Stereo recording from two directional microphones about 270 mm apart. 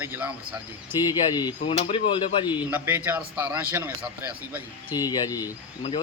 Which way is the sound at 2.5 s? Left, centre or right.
Centre.